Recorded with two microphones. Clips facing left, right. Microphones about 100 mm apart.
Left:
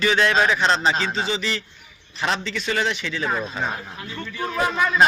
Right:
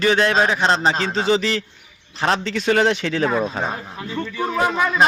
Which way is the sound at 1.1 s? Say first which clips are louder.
Right 6 dB; 65° right (ahead or behind).